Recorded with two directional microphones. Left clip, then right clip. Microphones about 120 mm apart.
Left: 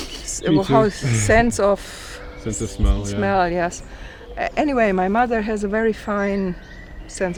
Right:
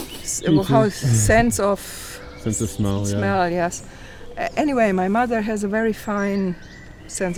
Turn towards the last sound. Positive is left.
turn(degrees=-45)  # may be behind; listen again after turning